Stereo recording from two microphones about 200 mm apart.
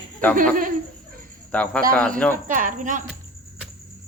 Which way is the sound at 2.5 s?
40° right (ahead or behind).